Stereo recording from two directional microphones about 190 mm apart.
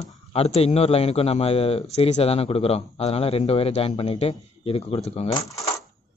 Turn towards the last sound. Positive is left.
turn(degrees=35)  # may be behind; listen again after turning